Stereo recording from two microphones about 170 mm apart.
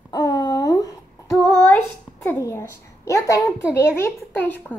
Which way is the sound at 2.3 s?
15° left (ahead or behind).